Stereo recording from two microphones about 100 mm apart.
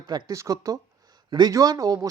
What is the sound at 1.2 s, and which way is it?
Speech, 45° right (ahead or behind).